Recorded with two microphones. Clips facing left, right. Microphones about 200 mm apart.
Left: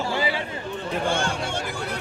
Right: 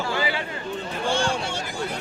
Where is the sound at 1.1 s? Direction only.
55° left (ahead or behind).